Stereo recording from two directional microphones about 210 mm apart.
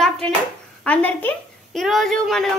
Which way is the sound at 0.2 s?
5° left (ahead or behind).